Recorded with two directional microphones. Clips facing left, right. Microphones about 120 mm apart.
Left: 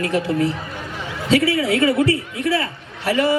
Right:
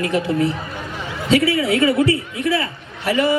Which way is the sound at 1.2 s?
40° left (ahead or behind).